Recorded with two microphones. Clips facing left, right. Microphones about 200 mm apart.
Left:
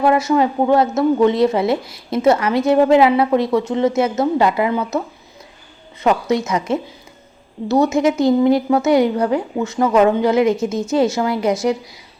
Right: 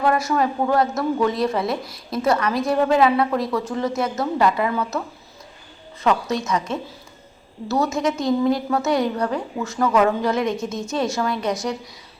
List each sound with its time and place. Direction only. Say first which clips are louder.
0.3 s a woman's voice: left 5 dB; 25° left (ahead or behind)
6.3 s a woman's voice: left 5 dB; 25° left (ahead or behind)